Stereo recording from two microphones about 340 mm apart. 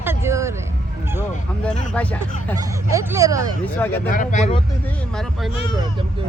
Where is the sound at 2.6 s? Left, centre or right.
Centre.